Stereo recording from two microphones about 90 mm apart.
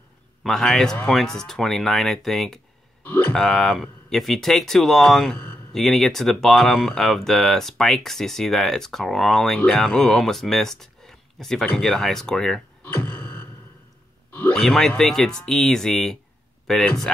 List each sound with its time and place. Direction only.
0.4 s a man's voice: 5° left (ahead or behind)
3.0 s a sound: 20° left (ahead or behind)
3.3 s speech: 5° left (ahead or behind)
12.8 s beatboxing: 20° left (ahead or behind)
14.5 s speech: 5° left (ahead or behind)